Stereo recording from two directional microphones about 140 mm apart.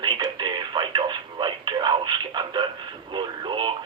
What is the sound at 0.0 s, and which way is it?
Radio, 30° right (ahead or behind).